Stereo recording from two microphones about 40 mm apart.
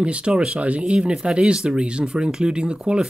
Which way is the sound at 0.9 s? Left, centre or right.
Right.